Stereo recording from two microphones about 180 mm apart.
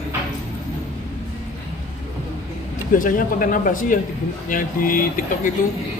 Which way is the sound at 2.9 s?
50° left (ahead or behind).